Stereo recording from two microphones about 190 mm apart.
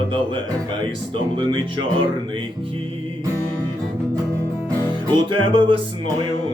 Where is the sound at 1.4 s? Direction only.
25° right (ahead or behind).